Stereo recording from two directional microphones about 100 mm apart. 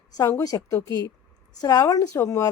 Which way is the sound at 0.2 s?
40° left (ahead or behind).